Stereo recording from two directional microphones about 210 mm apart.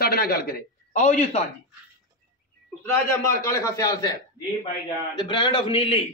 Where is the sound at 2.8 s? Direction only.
15° left (ahead or behind).